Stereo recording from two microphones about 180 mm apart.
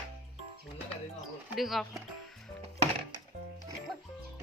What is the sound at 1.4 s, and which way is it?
Speech, centre (ahead or behind).